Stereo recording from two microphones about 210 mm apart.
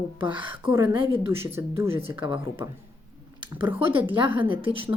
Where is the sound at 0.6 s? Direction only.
20° right (ahead or behind).